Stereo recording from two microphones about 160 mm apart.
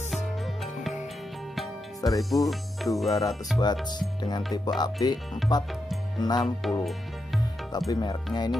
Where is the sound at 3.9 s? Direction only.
25° left (ahead or behind).